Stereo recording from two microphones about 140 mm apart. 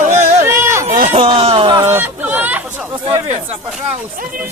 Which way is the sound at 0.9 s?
70° right (ahead or behind).